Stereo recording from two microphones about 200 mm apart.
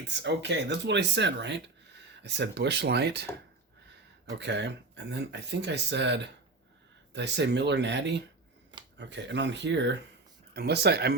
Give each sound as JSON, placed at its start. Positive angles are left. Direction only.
{"t": 0.1, "sound": "speech", "side_deg": -60}
{"t": 4.3, "sound": "speech", "side_deg": -60}